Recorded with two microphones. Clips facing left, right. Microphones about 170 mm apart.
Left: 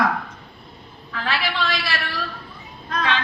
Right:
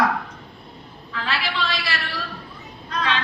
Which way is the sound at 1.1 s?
50° left (ahead or behind).